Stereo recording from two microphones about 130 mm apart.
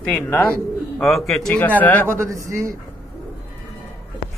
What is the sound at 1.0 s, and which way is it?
A man's voice, centre (ahead or behind).